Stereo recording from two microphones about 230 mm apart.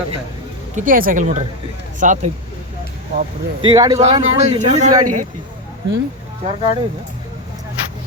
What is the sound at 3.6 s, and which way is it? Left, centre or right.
Speech, centre.